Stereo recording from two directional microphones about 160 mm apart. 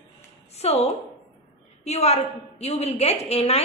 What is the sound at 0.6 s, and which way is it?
Speech, 40° left (ahead or behind).